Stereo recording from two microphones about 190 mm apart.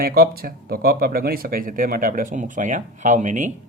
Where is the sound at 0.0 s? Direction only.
55° right (ahead or behind).